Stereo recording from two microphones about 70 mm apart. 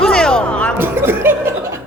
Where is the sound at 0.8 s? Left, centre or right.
Right.